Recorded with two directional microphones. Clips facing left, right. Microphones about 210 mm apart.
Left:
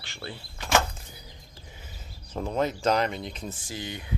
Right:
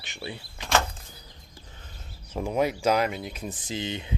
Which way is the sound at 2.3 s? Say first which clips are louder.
Right 2 dB; 10° right (ahead or behind).